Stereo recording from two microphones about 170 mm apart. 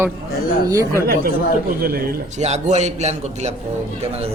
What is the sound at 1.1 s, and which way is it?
Speech, 60° right (ahead or behind).